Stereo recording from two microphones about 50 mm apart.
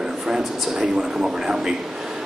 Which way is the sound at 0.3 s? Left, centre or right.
Centre.